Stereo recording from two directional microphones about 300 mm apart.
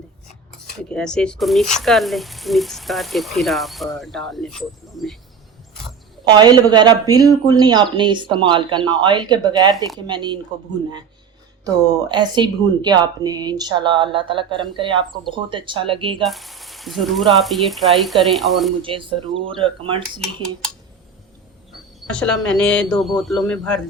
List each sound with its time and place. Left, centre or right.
0.8 s speech: centre
6.2 s speech: centre
11.6 s speech: centre
16.2 s speech: centre
18.8 s speech: centre
21.7 s speech: centre